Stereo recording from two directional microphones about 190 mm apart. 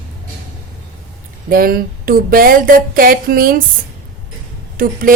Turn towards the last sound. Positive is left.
turn(degrees=-50)  # may be behind; listen again after turning